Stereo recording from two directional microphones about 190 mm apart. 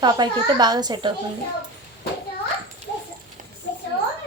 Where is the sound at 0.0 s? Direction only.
20° right (ahead or behind).